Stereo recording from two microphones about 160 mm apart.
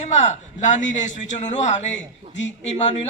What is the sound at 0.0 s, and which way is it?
A man's voice, 50° left (ahead or behind).